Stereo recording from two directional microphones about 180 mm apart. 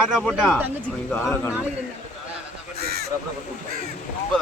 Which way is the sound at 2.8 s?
60° right (ahead or behind).